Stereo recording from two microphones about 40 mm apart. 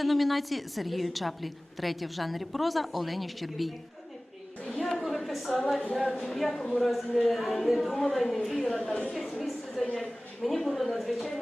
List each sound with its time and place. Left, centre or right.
0.0 s a woman's voice: centre
4.8 s a sound: centre
6.0 s a woman's voice: centre
6.6 s speech: centre
6.8 s a woman's voice: centre
8.5 s a woman's voice: centre
9.4 s a sound: centre
10.0 s a woman's voice: centre